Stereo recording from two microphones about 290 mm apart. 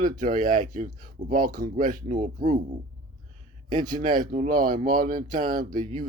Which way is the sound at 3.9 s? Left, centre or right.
Right.